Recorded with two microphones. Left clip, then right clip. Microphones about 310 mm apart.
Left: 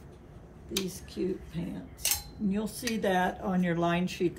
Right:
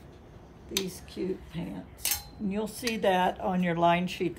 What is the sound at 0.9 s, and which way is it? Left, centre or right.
Speech, centre.